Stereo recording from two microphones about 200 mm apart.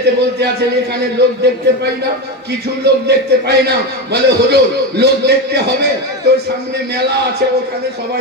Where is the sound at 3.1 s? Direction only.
55° right (ahead or behind).